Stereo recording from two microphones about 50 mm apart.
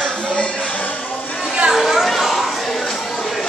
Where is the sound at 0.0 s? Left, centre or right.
Left.